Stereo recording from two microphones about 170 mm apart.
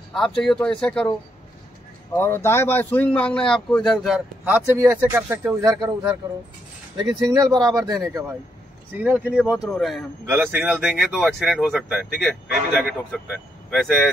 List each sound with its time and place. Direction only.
0.1 s speech: 5° left (ahead or behind)
2.1 s speech: 15° left (ahead or behind)
10.2 s speech: 10° right (ahead or behind)